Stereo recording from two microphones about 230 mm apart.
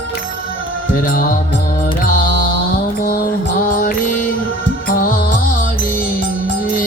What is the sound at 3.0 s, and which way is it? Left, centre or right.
Mantra, left.